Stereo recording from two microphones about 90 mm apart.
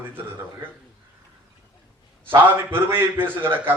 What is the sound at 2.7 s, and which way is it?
A man's voice, 25° right (ahead or behind).